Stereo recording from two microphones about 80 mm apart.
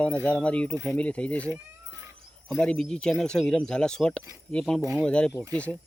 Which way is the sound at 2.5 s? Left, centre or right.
Centre.